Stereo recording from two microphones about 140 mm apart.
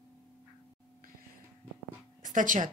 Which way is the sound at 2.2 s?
70° right (ahead or behind).